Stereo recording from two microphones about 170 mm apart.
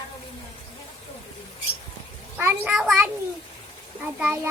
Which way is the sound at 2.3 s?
10° right (ahead or behind).